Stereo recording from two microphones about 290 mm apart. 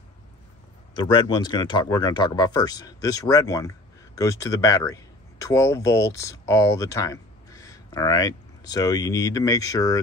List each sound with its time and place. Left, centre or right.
1.3 s speech: centre